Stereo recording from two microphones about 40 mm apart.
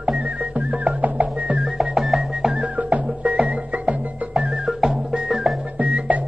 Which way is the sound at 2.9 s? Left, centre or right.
Right.